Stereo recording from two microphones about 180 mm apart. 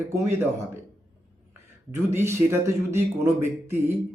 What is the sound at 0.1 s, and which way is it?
Speech, 15° right (ahead or behind).